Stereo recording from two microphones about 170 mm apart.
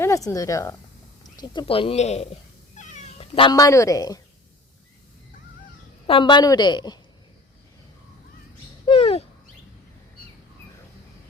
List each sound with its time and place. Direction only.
0.0 s speech: 15° left (ahead or behind)
1.2 s cat: 25° left (ahead or behind)
3.5 s a woman's voice: 20° left (ahead or behind)
6.1 s a woman's voice: 30° left (ahead or behind)
8.9 s bird: 35° left (ahead or behind)